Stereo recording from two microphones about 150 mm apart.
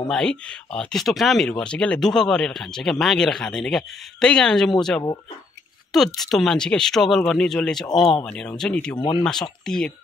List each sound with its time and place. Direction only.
0.1 s speech: 5° left (ahead or behind)
8.9 s speech: 35° left (ahead or behind)
9.7 s speech: 5° left (ahead or behind)